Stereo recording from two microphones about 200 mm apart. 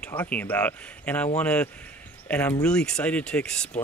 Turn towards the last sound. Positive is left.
turn(degrees=5)  # may be behind; listen again after turning